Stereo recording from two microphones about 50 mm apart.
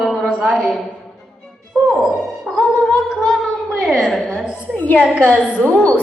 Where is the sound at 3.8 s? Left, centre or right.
Centre.